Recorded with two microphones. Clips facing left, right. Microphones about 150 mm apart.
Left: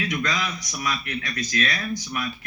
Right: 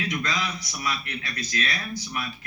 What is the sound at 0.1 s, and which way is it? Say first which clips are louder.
A man's voice: left 2 dB; 35° right (ahead or behind).